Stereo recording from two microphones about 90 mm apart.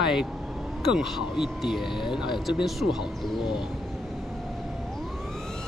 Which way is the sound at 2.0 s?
65° left (ahead or behind).